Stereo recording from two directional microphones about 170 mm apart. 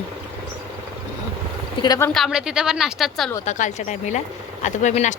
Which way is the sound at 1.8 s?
25° left (ahead or behind).